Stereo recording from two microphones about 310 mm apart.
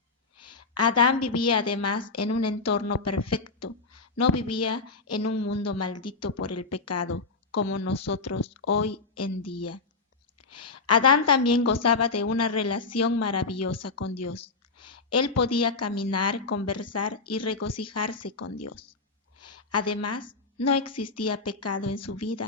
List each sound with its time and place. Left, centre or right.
0.4 s a woman's voice: left
14.8 s a woman's voice: left